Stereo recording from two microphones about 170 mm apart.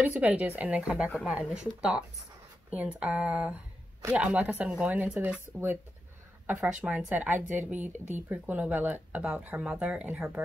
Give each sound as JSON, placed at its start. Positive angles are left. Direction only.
{"t": 0.0, "sound": "speech", "side_deg": -10}